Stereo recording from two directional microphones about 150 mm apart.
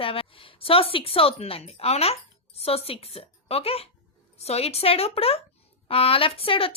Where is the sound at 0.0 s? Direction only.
40° left (ahead or behind).